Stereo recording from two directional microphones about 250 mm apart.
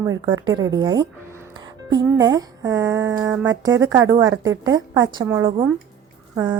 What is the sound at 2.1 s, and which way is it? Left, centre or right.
A woman's voice, centre.